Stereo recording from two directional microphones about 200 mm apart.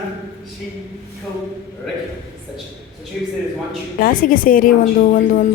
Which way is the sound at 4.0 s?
45° left (ahead or behind).